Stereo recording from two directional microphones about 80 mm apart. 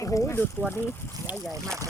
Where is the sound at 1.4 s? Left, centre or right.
Centre.